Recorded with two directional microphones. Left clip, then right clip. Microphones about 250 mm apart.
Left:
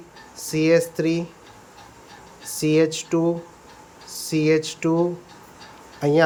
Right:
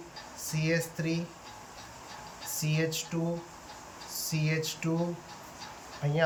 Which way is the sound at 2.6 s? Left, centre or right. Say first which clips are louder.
Left 14 dB; centre.